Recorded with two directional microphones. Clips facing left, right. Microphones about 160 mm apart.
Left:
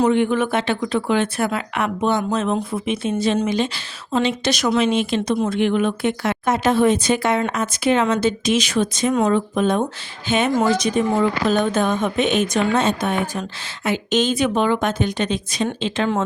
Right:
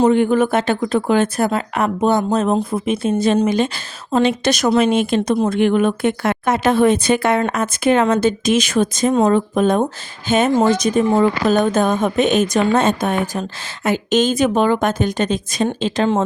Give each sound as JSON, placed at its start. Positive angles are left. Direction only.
{"t": 0.0, "sound": "speech", "side_deg": -40}